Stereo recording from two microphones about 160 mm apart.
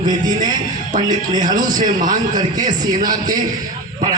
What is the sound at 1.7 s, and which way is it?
Speech, 55° right (ahead or behind).